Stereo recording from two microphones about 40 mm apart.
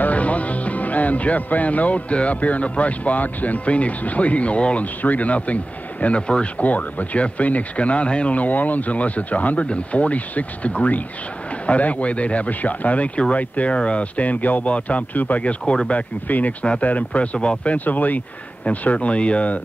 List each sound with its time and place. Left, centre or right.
0.0 s speech: left
5.0 s speech: left
6.6 s speech: left
8.4 s speech: left
15.6 s speech: centre
16.3 s speech: left
17.7 s speech: left